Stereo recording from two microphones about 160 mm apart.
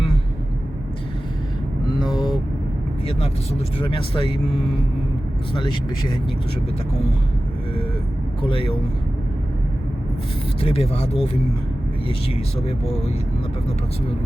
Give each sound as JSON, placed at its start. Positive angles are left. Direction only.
{"t": 2.0, "sound": "vehicle", "side_deg": 30}
{"t": 3.1, "sound": "speech", "side_deg": 40}
{"t": 5.5, "sound": "speech", "side_deg": 30}
{"t": 8.4, "sound": "speech", "side_deg": 30}
{"t": 10.6, "sound": "speech", "side_deg": 40}